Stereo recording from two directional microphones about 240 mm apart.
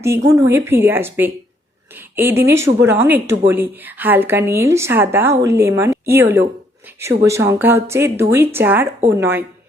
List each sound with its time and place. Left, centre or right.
0.0 s a woman's voice: centre